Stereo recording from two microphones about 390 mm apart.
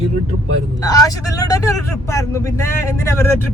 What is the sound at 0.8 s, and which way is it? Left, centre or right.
Speech, centre.